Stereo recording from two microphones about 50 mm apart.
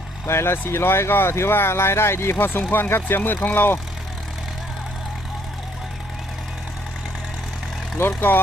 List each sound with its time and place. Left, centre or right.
0.3 s speech: left
2.4 s speech: left
7.9 s speech: left